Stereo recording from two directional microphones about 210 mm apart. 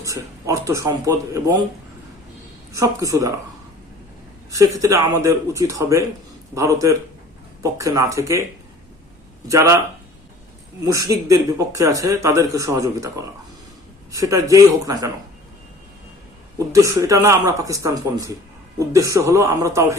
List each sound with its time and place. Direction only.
0.0 s speech: 15° right (ahead or behind)
2.7 s speech: 15° right (ahead or behind)
4.5 s speech: 15° right (ahead or behind)
9.5 s speech: 15° right (ahead or behind)
11.3 s speech: 15° right (ahead or behind)
16.6 s speech: 15° right (ahead or behind)